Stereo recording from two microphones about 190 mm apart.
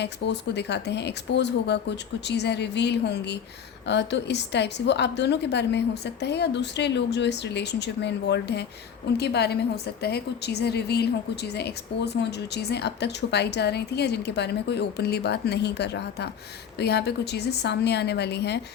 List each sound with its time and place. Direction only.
0.0 s a woman's voice: 65° left (ahead or behind)